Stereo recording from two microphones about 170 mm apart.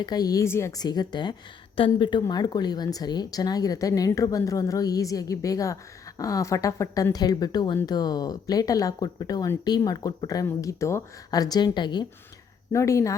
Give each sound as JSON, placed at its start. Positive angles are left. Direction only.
{"t": 0.0, "sound": "a woman's voice", "side_deg": 20}